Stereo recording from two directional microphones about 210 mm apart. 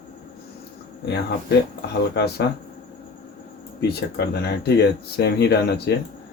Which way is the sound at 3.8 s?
50° left (ahead or behind).